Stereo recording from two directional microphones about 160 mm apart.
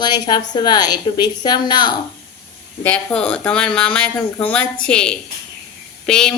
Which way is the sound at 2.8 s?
5° left (ahead or behind).